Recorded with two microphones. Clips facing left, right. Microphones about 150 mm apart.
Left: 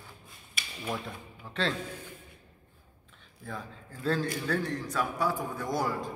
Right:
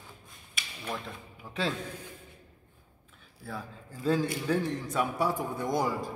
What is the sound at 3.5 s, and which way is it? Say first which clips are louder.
Speech: right 1 dB; 10° right (ahead or behind).